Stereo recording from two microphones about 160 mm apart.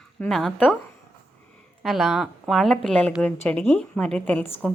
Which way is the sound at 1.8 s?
Centre (ahead or behind).